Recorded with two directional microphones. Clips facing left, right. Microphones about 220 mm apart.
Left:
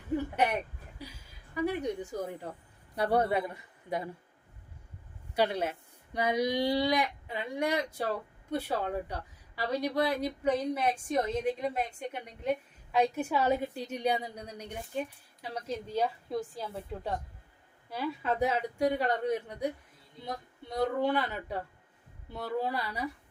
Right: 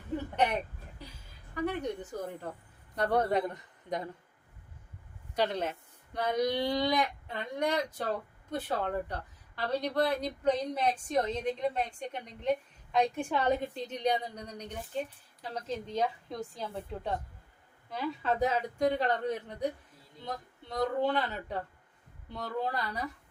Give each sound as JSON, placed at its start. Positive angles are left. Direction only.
{"t": 1.5, "sound": "a woman's voice", "side_deg": 10}
{"t": 5.3, "sound": "a woman's voice", "side_deg": 10}